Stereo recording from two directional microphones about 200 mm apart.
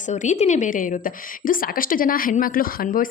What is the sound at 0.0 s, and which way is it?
A woman's voice, 35° left (ahead or behind).